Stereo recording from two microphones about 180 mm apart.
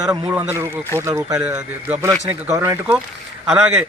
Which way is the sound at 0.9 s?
15° right (ahead or behind).